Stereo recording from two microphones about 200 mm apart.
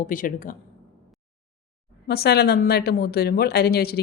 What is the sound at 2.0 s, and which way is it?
A woman's voice, 55° left (ahead or behind).